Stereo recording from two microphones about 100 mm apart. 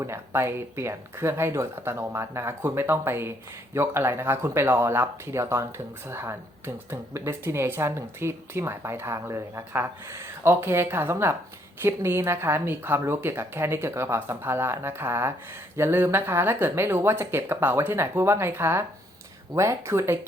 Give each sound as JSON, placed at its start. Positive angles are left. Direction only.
{"t": 0.0, "sound": "speech", "side_deg": -25}